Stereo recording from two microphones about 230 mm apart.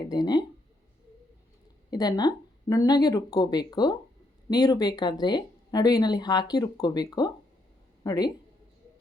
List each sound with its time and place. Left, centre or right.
0.1 s speech: centre
1.9 s speech: centre